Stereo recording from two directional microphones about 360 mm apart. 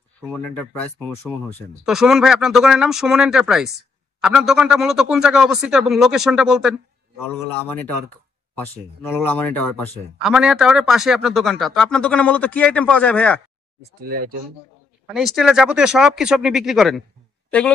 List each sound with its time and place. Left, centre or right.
0.2 s speech: centre
9.1 s speech: centre
14.0 s speech: right
15.0 s speech: centre